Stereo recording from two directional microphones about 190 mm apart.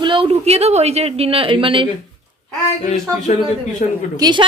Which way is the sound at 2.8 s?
40° left (ahead or behind).